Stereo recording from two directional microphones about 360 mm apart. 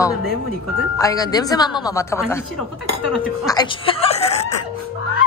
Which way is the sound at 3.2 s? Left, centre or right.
Centre.